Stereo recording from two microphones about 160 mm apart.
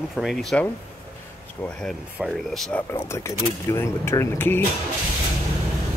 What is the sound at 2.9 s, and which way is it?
Speech, 15° left (ahead or behind).